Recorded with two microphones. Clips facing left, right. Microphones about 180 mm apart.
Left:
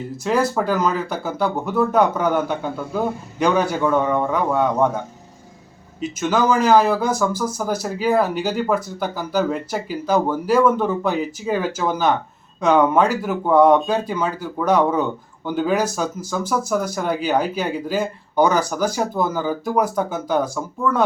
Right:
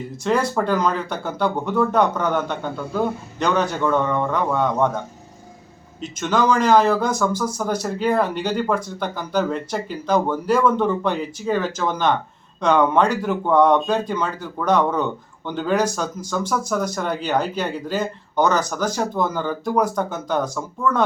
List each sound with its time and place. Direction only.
0.3 s speech: 5° left (ahead or behind)
6.0 s speech: 5° left (ahead or behind)